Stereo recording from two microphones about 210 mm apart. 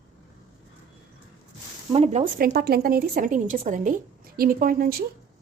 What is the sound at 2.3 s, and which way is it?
A woman's voice, 45° right (ahead or behind).